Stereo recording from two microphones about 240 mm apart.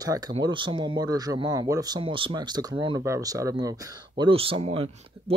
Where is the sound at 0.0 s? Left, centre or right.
Centre.